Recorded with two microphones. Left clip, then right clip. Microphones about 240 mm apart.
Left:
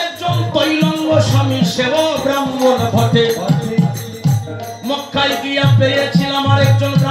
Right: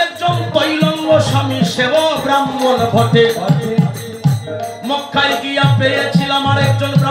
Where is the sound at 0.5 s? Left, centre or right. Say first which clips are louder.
Left 2 dB; right.